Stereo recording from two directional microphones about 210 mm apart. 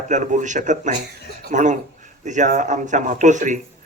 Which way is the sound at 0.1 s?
35° right (ahead or behind).